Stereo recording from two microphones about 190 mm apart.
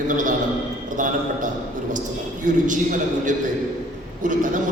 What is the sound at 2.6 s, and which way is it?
A man's voice, 45° right (ahead or behind).